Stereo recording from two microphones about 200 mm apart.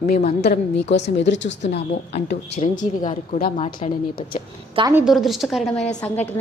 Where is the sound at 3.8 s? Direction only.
30° left (ahead or behind).